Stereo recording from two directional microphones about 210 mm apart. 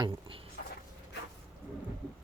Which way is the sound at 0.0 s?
25° right (ahead or behind).